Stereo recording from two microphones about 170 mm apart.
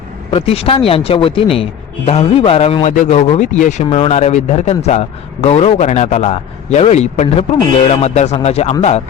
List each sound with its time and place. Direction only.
0.3 s speech: 35° left (ahead or behind)
2.9 s speech: 45° left (ahead or behind)